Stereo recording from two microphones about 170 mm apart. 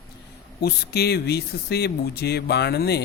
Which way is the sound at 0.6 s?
70° left (ahead or behind).